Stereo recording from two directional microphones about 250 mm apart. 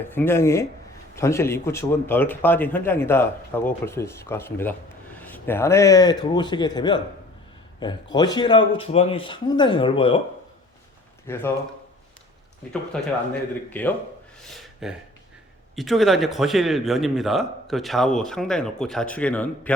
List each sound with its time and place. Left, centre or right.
0.0 s a man's voice: centre
11.3 s a man's voice: centre
12.9 s a man's voice: centre
14.4 s a sound: centre
15.7 s a man's voice: centre